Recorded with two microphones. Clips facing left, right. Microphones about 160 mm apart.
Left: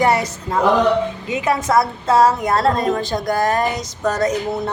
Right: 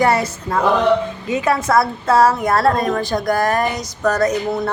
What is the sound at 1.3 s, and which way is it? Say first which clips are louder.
A woman's voice: right 2 dB; 20° left (ahead or behind).